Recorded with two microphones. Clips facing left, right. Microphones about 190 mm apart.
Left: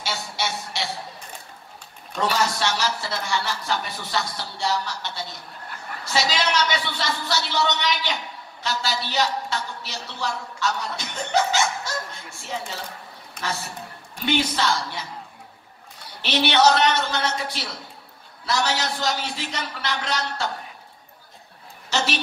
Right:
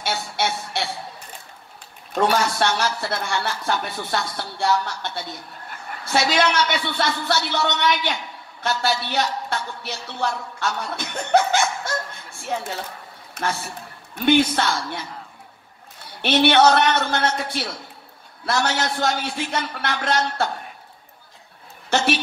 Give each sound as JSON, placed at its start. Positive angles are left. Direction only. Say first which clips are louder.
{"t": 0.0, "sound": "a woman's voice", "louder": "right 4 dB", "side_deg": -60}
{"t": 2.1, "sound": "a woman's voice", "louder": "right 4 dB", "side_deg": -55}
{"t": 14.1, "sound": "a woman's voice", "louder": "right 6 dB", "side_deg": -55}
{"t": 16.2, "sound": "a woman's voice", "louder": "right 4 dB", "side_deg": -55}
{"t": 21.9, "sound": "a woman's voice", "louder": "right 4 dB", "side_deg": -55}